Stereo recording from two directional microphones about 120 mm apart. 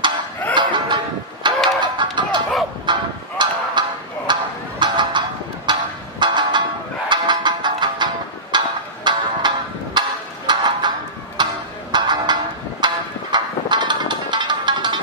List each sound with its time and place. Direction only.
0.6 s music: 40° right (ahead or behind)
2.9 s honk: 40° right (ahead or behind)
4.3 s music: 40° right (ahead or behind)